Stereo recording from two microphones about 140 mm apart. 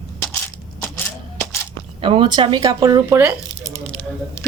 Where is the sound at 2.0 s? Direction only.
35° right (ahead or behind); by 3.8 s 15° right (ahead or behind).